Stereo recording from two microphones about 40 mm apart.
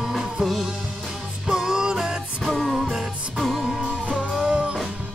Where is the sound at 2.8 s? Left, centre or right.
Centre.